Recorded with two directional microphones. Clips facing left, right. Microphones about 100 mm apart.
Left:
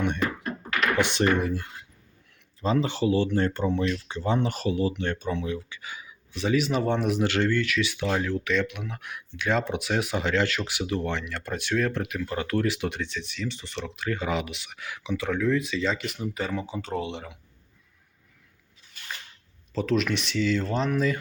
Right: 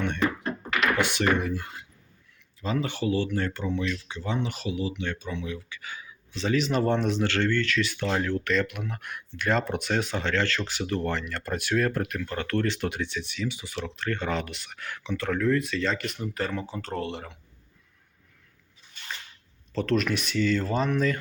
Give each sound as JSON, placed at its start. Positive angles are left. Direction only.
{"t": 0.9, "sound": "speech", "side_deg": 25}
{"t": 2.6, "sound": "speech", "side_deg": 30}
{"t": 5.5, "sound": "speech", "side_deg": 25}
{"t": 13.9, "sound": "speech", "side_deg": 10}
{"t": 19.7, "sound": "speech", "side_deg": 0}